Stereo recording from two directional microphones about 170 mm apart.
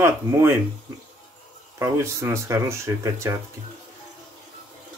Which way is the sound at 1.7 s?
15° right (ahead or behind).